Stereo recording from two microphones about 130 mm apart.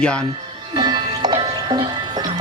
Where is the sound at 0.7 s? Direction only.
35° right (ahead or behind).